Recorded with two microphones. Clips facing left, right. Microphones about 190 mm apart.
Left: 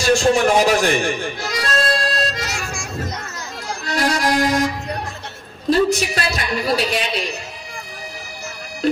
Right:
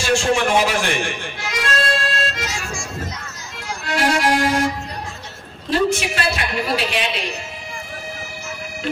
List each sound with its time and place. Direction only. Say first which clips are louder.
0.0 s music: left 3 dB; 40° left (ahead or behind)
3.8 s a man's voice: right 1 dB; 40° left (ahead or behind)
5.7 s a man's voice: left 3 dB; 40° left (ahead or behind)